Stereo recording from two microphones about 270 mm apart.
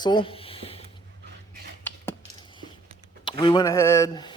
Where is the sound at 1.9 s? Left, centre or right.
Centre.